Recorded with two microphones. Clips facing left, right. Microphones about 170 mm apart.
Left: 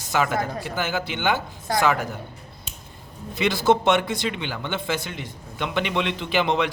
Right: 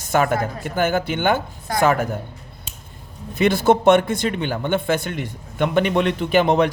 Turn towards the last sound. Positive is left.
turn(degrees=-45)  # may be behind; listen again after turning